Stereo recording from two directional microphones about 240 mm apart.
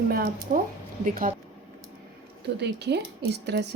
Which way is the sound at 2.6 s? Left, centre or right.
Right.